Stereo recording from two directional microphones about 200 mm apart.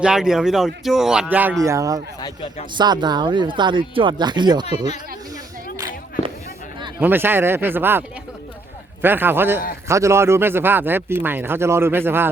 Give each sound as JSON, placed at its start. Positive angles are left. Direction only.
{"t": 0.0, "sound": "speech", "side_deg": -5}
{"t": 7.0, "sound": "speech", "side_deg": -10}